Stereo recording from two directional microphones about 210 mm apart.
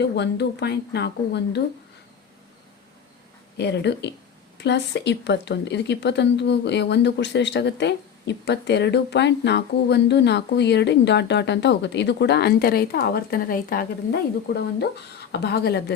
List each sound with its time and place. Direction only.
0.0 s speech: 55° left (ahead or behind)
3.6 s speech: 55° left (ahead or behind)